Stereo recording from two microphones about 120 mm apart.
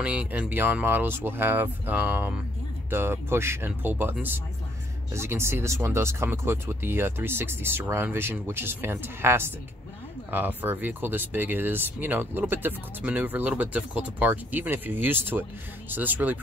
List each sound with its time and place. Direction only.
0.0 s speech: 10° right (ahead or behind)